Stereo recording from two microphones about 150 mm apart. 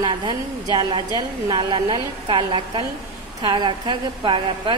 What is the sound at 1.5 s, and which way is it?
A woman's voice, 30° right (ahead or behind).